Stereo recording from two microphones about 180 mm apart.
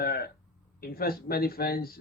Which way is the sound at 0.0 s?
60° left (ahead or behind).